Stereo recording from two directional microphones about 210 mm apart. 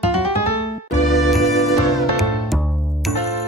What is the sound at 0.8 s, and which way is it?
Music, 35° left (ahead or behind).